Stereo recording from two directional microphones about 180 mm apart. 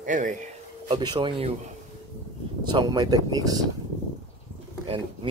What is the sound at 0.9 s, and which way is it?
Speech, 25° right (ahead or behind).